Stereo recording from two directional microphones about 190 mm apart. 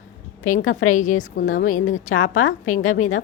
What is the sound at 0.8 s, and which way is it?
A woman's voice, 40° left (ahead or behind).